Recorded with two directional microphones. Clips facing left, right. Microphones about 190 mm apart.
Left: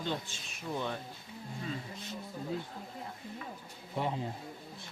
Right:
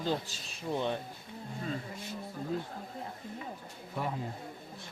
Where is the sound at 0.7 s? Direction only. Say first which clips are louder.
Right 4 dB; 20° right (ahead or behind).